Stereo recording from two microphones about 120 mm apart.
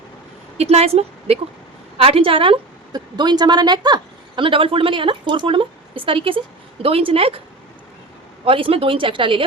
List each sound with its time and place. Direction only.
0.5 s a woman's voice: 60° right (ahead or behind)
2.9 s speech: 35° right (ahead or behind); by 7.4 s 55° right (ahead or behind)
8.4 s speech: 50° right (ahead or behind)